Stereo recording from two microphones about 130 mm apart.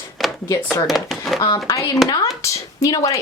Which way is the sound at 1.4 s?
30° left (ahead or behind).